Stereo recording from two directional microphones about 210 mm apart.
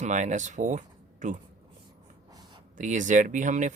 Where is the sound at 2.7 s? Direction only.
35° right (ahead or behind).